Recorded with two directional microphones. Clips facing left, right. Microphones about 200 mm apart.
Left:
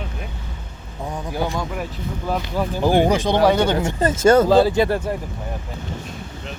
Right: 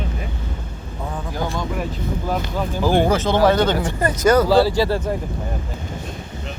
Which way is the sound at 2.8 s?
15° left (ahead or behind).